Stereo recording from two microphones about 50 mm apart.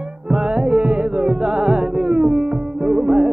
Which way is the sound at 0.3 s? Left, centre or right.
Right.